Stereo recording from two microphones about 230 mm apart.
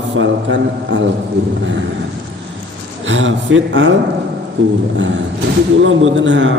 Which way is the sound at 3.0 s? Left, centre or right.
Right.